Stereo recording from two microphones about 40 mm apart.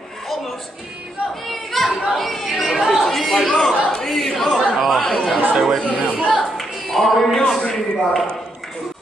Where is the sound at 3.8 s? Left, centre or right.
Centre.